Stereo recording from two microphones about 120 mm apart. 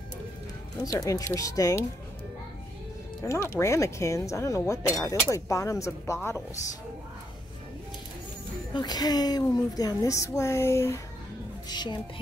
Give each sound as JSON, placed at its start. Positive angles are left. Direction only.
{"t": 0.8, "sound": "speech", "side_deg": 25}
{"t": 3.3, "sound": "speech", "side_deg": 25}
{"t": 8.7, "sound": "speech", "side_deg": 35}
{"t": 11.7, "sound": "music", "side_deg": 40}